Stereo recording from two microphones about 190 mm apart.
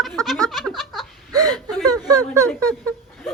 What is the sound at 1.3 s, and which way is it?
Whimper, 20° right (ahead or behind).